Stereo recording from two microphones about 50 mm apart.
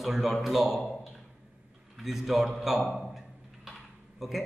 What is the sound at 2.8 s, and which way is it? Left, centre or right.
Speech, centre.